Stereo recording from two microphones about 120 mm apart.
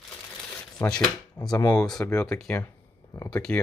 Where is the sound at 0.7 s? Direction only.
5° left (ahead or behind).